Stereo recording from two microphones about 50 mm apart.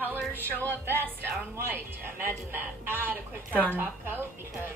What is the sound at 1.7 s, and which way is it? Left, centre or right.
A woman's voice, right.